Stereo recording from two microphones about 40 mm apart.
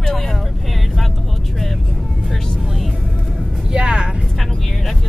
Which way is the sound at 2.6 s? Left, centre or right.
Centre.